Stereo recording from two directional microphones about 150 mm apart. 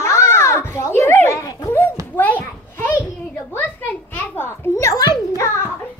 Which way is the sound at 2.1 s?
10° left (ahead or behind).